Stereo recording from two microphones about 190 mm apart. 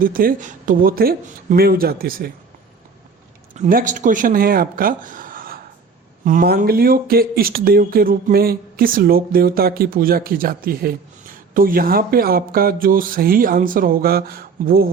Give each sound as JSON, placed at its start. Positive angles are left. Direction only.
{"t": 0.0, "sound": "speech", "side_deg": -50}
{"t": 3.5, "sound": "speech", "side_deg": -45}